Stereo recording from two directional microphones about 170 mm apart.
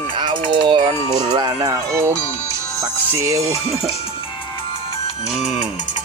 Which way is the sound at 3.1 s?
20° right (ahead or behind).